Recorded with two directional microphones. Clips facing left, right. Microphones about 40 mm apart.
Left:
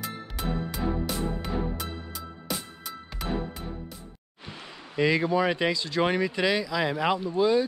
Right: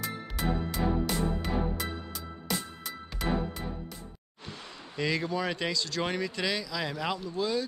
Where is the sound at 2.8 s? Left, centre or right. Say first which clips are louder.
Right 1 dB; centre.